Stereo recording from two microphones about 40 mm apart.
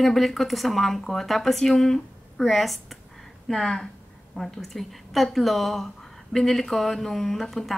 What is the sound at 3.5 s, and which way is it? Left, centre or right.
Speech, centre.